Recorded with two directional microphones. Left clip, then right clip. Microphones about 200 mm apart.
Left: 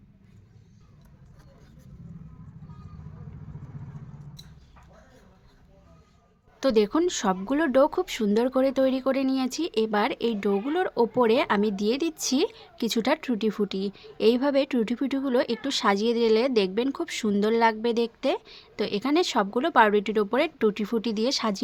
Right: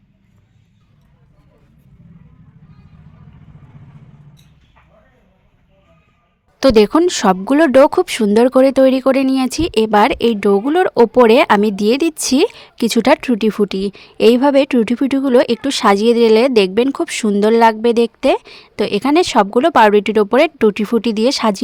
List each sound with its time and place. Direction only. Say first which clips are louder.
6.6 s speech: right 12 dB; 50° right (ahead or behind)